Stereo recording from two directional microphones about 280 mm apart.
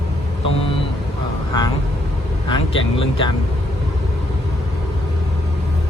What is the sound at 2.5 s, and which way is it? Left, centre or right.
Speech, centre.